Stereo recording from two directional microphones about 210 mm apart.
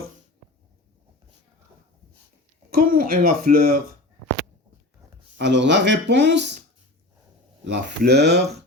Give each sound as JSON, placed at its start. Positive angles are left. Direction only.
{"t": 2.6, "sound": "speech", "side_deg": -45}
{"t": 5.4, "sound": "speech", "side_deg": -55}
{"t": 7.6, "sound": "speech", "side_deg": -55}